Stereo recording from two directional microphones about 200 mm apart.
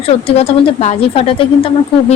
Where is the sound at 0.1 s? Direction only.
30° left (ahead or behind).